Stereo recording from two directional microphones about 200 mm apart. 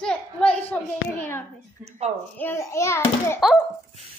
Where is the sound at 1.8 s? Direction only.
35° right (ahead or behind).